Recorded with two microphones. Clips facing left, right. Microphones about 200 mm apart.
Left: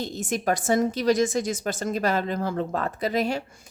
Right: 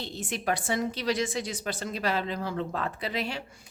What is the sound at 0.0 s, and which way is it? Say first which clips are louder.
A woman's voice: left 6 dB; 45° left (ahead or behind).